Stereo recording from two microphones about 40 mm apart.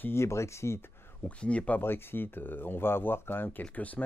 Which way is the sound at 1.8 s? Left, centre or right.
Left.